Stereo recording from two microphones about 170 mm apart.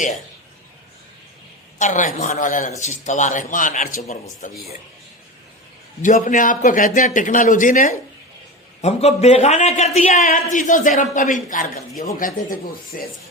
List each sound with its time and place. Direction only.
1.8 s a man's voice: 45° left (ahead or behind)
6.0 s a man's voice: 50° left (ahead or behind)